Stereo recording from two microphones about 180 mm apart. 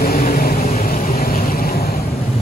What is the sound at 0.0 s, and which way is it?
Vehicle, 55° left (ahead or behind).